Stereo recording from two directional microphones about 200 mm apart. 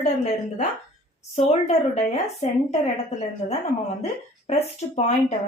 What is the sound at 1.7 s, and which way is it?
Speech, 35° left (ahead or behind).